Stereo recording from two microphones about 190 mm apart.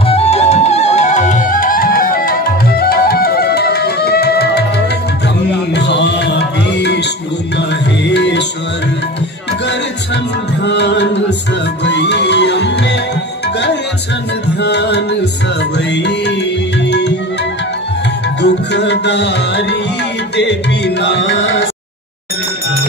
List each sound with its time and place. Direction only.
0.1 s music: 35° left (ahead or behind); by 4.6 s 55° left (ahead or behind)
5.8 s music: 65° left (ahead or behind)
10.6 s music: 65° left (ahead or behind)
14.6 s music: 65° left (ahead or behind)
18.4 s music: 65° left (ahead or behind)